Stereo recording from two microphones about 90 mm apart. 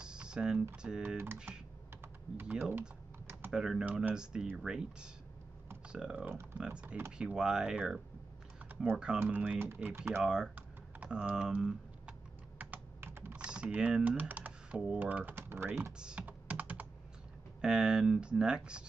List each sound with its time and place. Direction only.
0.0 s typing: 10° right (ahead or behind)
0.8 s speech: 10° right (ahead or behind)
1.1 s speech: 25° right (ahead or behind)
2.3 s speech: 10° right (ahead or behind)
10.2 s speech: 10° right (ahead or behind)
10.5 s typing: 15° right (ahead or behind)
15.0 s speech: 20° right (ahead or behind)
16.0 s computer keyboard: 10° right (ahead or behind)
17.6 s speech: 10° right (ahead or behind)